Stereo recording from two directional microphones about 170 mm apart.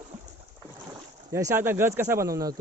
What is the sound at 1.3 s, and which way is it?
Speech, 15° right (ahead or behind).